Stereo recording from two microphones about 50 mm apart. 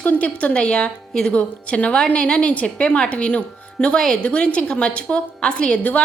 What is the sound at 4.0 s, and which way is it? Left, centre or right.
A woman's voice, centre.